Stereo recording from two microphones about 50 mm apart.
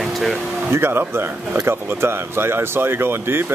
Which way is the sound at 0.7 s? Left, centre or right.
Right.